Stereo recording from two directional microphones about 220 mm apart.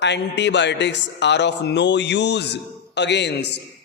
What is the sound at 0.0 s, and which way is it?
Speech, 50° left (ahead or behind).